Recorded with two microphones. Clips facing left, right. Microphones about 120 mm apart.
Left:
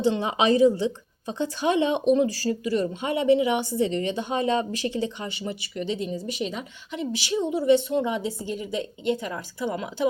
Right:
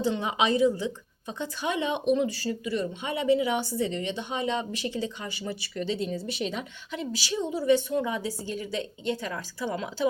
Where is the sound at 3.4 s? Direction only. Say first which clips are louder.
Left 4 dB; 20° left (ahead or behind); by 4.6 s 45° left (ahead or behind).